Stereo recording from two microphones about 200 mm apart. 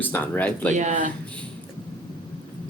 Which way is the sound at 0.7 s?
40° right (ahead or behind).